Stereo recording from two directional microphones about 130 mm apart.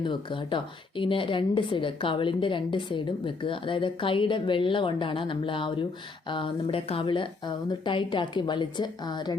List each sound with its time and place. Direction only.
0.0 s a woman's voice: 40° left (ahead or behind)